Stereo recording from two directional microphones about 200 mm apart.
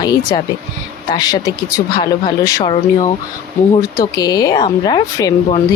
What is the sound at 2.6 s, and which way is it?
Speech, 30° left (ahead or behind).